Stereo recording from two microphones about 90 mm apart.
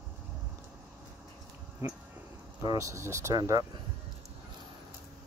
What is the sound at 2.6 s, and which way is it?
Speech, 40° right (ahead or behind).